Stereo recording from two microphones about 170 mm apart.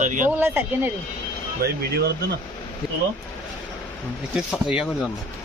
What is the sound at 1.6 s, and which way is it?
Speech, 70° right (ahead or behind).